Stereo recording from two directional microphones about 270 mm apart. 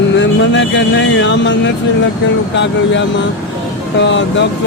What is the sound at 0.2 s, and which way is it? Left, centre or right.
Speech, left.